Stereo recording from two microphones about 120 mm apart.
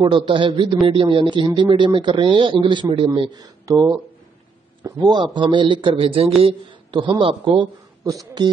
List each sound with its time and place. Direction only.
0.0 s a man's voice: 40° right (ahead or behind)
8.0 s speech: 30° right (ahead or behind)